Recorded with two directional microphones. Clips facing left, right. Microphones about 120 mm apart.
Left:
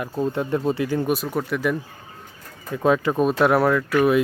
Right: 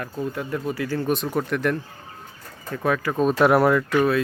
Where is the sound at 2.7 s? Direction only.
20° left (ahead or behind).